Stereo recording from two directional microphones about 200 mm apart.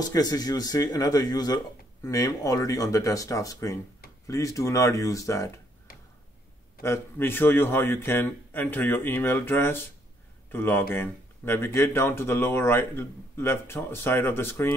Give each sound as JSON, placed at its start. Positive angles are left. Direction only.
{"t": 0.0, "sound": "speech", "side_deg": 20}
{"t": 5.9, "sound": "tick-tock", "side_deg": 50}
{"t": 6.8, "sound": "speech", "side_deg": 10}